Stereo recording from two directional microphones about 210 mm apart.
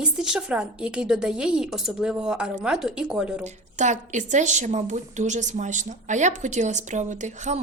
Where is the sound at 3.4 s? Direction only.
35° right (ahead or behind).